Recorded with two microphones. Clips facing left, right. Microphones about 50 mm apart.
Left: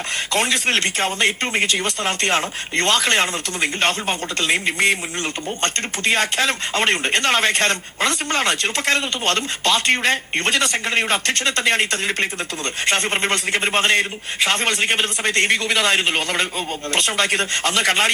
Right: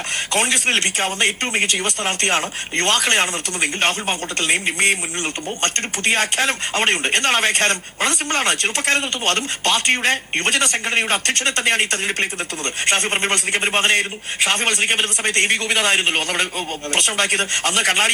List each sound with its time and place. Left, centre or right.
0.3 s speech: right